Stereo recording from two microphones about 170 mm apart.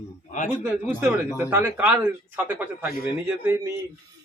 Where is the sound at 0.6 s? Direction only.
10° right (ahead or behind).